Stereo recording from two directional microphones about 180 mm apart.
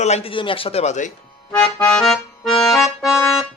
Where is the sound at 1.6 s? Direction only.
20° left (ahead or behind).